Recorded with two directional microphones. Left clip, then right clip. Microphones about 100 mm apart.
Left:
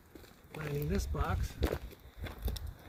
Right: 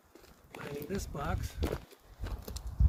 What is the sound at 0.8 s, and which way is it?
Speech, 45° right (ahead or behind).